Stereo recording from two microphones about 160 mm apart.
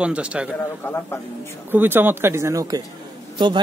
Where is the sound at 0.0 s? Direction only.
5° right (ahead or behind).